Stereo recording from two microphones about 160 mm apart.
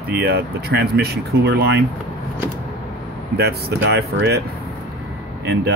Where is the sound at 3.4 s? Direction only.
90° right.